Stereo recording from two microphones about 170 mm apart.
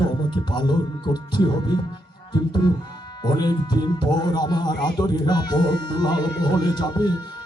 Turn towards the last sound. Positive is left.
turn(degrees=25)  # may be behind; listen again after turning